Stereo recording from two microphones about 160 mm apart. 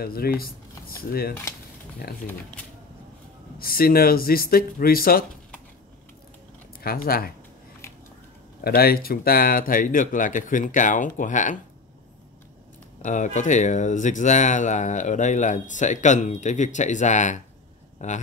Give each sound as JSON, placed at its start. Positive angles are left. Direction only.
{"t": 0.0, "sound": "speech", "side_deg": 70}
{"t": 3.5, "sound": "speech", "side_deg": 70}
{"t": 6.8, "sound": "speech", "side_deg": 70}
{"t": 8.6, "sound": "speech", "side_deg": 70}
{"t": 13.0, "sound": "speech", "side_deg": 50}